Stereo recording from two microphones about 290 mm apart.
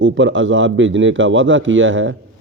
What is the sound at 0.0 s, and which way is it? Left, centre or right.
Speech, right.